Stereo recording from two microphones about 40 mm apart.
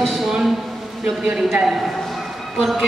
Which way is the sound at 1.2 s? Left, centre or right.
Centre.